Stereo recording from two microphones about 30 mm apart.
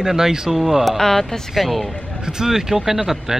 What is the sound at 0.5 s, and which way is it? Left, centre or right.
Speech, centre.